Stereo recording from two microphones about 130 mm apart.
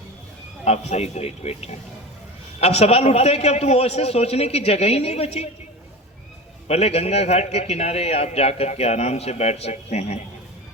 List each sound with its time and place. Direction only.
0.6 s a man's voice: 55° left (ahead or behind)
6.7 s a man's voice: 55° left (ahead or behind)